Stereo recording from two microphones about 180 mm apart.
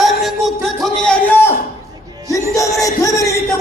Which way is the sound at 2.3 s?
15° left (ahead or behind).